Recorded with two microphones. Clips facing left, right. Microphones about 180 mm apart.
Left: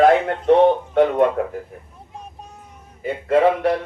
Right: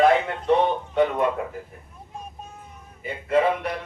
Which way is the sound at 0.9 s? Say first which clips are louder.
Left 6 dB; 60° left (ahead or behind).